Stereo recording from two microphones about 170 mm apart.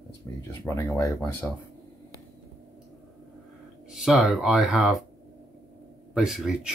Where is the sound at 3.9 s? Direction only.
Centre (ahead or behind).